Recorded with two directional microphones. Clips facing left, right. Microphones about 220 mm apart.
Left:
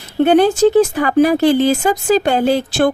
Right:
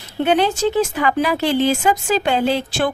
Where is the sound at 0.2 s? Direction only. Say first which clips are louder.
Left 6 dB; 45° left (ahead or behind).